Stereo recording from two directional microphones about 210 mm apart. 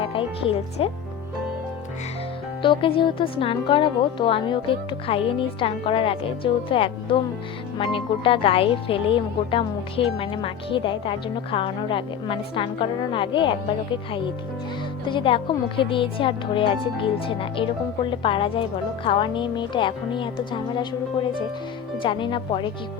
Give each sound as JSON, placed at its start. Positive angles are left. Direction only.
{"t": 0.0, "sound": "speech", "side_deg": 25}
{"t": 2.6, "sound": "speech", "side_deg": 25}
{"t": 22.0, "sound": "speech", "side_deg": 20}